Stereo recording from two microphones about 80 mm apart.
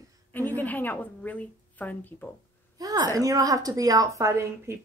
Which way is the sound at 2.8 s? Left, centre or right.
Right.